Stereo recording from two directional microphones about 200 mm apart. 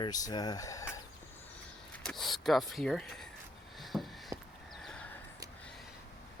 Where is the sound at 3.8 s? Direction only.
Centre (ahead or behind).